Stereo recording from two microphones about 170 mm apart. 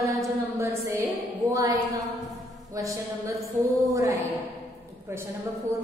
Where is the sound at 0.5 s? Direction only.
20° right (ahead or behind).